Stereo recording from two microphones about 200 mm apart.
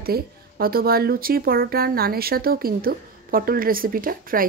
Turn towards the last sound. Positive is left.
turn(degrees=-45)  # may be behind; listen again after turning